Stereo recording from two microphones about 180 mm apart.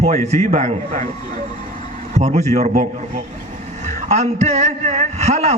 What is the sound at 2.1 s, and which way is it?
Speech, 40° right (ahead or behind).